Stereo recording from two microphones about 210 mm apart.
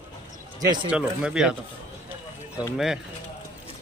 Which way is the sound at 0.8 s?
5° right (ahead or behind).